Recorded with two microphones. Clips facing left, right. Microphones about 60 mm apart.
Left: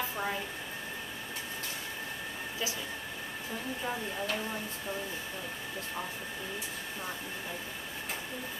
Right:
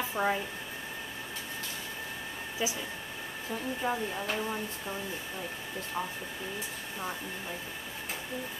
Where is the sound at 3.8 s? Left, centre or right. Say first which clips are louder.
Right 3 dB; centre.